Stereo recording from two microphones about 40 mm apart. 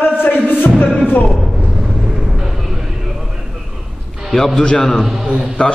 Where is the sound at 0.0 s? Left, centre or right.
Left.